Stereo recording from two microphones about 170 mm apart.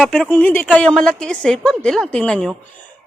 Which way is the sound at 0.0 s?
5° left (ahead or behind).